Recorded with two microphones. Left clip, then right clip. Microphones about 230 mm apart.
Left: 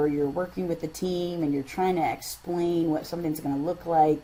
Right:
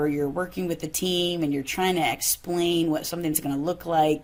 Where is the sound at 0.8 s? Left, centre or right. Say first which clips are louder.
Right 4 dB; centre.